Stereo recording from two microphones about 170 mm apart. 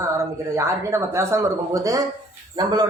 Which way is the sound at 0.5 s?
15° right (ahead or behind).